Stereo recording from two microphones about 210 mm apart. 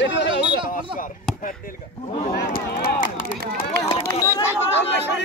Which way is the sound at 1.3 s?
Centre (ahead or behind).